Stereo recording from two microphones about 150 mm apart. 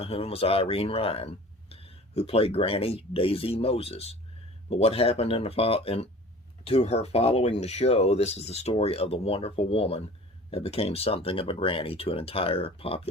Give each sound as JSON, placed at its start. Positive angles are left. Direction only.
{"t": 0.0, "sound": "speech", "side_deg": 40}